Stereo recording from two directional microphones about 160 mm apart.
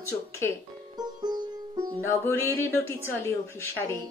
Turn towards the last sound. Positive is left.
turn(degrees=15)  # may be behind; listen again after turning